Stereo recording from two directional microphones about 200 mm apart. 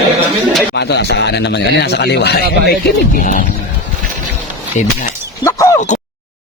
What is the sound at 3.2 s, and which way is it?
Speech, 40° left (ahead or behind).